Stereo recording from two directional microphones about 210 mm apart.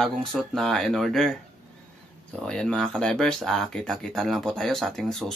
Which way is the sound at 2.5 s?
5° left (ahead or behind).